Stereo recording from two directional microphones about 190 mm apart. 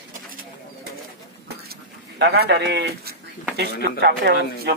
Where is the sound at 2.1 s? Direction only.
55° right (ahead or behind).